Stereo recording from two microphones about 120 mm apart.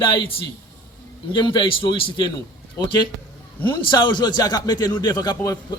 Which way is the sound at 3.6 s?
40° left (ahead or behind).